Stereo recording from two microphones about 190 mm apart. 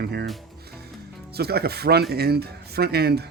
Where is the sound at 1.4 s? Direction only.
55° right (ahead or behind).